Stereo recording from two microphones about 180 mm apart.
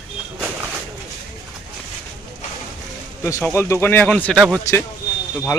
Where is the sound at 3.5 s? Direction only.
15° left (ahead or behind).